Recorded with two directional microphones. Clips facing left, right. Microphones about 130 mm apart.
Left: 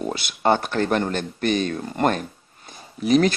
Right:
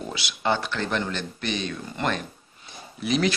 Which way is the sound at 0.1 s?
50° left (ahead or behind).